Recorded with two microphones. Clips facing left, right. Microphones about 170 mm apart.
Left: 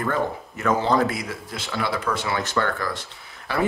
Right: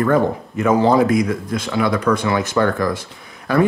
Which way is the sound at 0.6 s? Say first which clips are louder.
Right 6 dB; 10° right (ahead or behind).